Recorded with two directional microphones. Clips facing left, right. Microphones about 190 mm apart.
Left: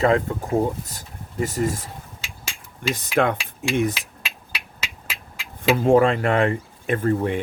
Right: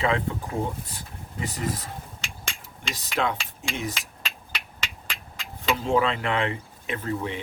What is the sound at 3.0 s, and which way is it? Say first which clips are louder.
Cutlery: left 6 dB; 55° left (ahead or behind).